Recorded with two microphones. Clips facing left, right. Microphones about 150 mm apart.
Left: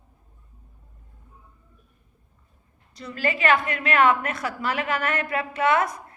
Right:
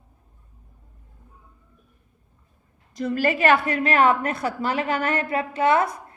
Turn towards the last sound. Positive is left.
turn(degrees=-30)  # may be behind; listen again after turning